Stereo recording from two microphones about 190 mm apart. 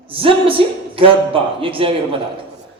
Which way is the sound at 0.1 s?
30° right (ahead or behind).